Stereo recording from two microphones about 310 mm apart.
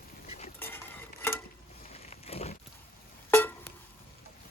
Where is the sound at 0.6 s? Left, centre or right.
Centre.